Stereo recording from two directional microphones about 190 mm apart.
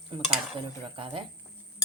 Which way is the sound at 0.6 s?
25° right (ahead or behind).